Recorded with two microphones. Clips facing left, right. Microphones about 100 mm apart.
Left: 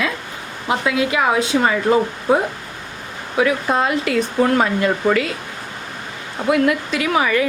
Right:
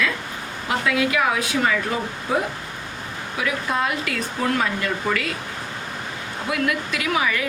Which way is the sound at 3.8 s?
25° left (ahead or behind).